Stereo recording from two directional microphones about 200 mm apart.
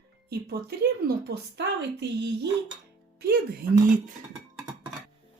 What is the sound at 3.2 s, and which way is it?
Speech, 50° right (ahead or behind).